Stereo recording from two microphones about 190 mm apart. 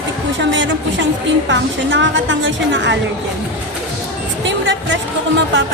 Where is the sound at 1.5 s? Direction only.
75° right (ahead or behind).